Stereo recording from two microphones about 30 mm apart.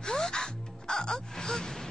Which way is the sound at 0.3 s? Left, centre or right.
Left.